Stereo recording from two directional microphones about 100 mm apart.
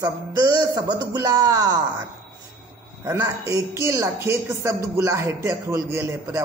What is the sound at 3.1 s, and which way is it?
Speech, 35° right (ahead or behind).